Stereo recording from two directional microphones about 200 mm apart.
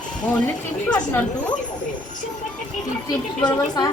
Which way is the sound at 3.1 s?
20° left (ahead or behind).